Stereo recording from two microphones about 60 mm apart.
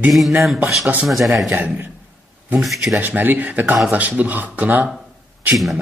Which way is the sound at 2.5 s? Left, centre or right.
Centre.